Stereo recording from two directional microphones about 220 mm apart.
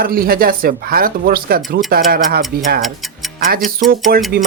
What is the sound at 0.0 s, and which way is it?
Speech, 40° right (ahead or behind).